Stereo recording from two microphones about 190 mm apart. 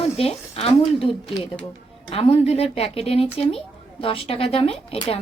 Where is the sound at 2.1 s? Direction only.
30° left (ahead or behind).